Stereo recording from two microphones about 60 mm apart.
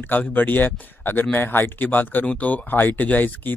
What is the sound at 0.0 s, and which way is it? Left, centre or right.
Speech, left.